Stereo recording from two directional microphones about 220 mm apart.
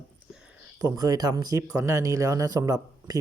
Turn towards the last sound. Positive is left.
turn(degrees=-15)  # may be behind; listen again after turning